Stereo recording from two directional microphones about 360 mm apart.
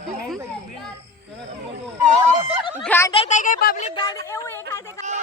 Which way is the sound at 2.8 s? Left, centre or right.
Centre.